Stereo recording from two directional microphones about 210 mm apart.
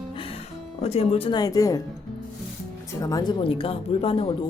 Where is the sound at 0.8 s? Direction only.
30° left (ahead or behind).